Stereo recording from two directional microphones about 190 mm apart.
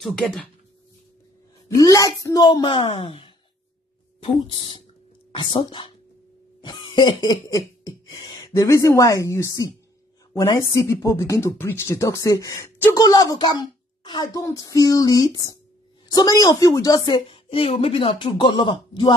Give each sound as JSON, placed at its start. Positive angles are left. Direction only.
{"t": 1.7, "sound": "a woman's voice", "side_deg": 15}